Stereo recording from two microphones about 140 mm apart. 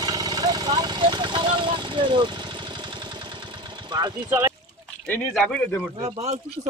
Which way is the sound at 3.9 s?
30° right (ahead or behind).